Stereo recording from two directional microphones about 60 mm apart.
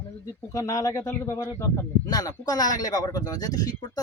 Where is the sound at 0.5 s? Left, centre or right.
Left.